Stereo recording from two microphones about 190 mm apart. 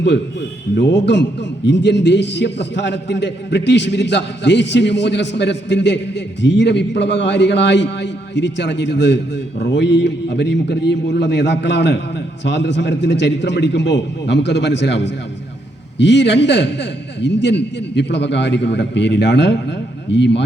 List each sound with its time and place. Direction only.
0.8 s a man's voice: 65° left (ahead or behind)